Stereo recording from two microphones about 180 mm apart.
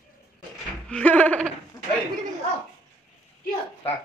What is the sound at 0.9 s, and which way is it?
Laughter, 5° left (ahead or behind).